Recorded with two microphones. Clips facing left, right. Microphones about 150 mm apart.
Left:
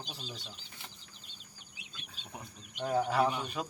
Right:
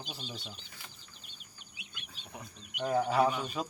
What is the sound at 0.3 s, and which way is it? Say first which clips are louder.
Speech: right 2 dB; 25° right (ahead or behind).